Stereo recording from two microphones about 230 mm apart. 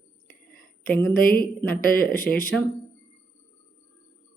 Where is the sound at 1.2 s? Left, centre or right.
Left.